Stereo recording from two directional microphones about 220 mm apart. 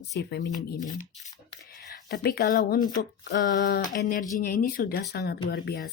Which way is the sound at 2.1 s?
45° left (ahead or behind).